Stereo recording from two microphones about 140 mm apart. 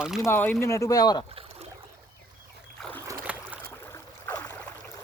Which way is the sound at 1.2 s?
45° right (ahead or behind).